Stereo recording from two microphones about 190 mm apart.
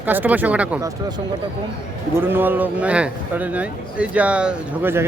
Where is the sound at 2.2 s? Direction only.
10° right (ahead or behind).